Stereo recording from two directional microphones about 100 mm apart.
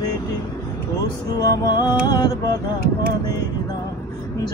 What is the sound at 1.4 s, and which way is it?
Music, 40° left (ahead or behind).